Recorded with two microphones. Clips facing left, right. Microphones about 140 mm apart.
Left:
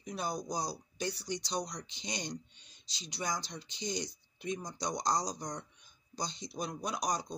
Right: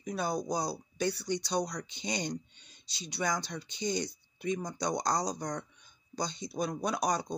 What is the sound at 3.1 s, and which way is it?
Speech, 65° right (ahead or behind).